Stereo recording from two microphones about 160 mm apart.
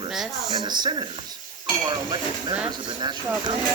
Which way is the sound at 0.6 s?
25° right (ahead or behind).